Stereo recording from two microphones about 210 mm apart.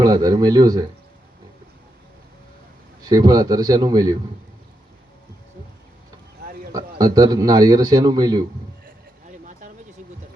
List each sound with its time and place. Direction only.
0.0 s speech: 15° right (ahead or behind)
3.0 s a man's voice: 20° right (ahead or behind)
6.7 s a man's voice: 15° right (ahead or behind)